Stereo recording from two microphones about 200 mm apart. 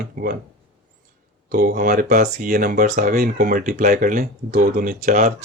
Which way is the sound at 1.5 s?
50° right (ahead or behind).